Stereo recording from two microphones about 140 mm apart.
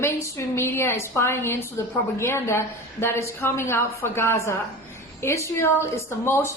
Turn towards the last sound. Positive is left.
turn(degrees=20)  # may be behind; listen again after turning